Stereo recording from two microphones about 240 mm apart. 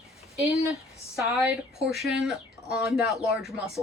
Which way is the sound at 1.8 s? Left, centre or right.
Centre.